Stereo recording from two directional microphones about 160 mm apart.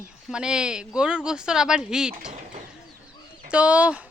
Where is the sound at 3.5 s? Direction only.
10° right (ahead or behind).